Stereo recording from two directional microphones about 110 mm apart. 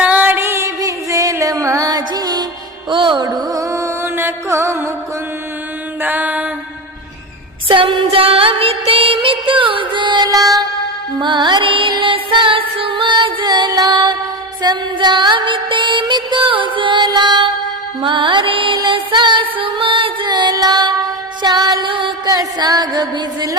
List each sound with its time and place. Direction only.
0.0 s music: 15° right (ahead or behind); by 3.2 s 45° right (ahead or behind)
3.2 s music: 35° right (ahead or behind)
6.0 s music: 15° right (ahead or behind)
7.7 s music: 50° right (ahead or behind); by 10.6 s 35° right (ahead or behind)
11.2 s music: 45° right (ahead or behind)
22.3 s music: 35° right (ahead or behind)